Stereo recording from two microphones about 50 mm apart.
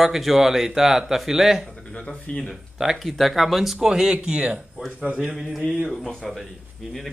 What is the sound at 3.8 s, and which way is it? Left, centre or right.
Speech, centre.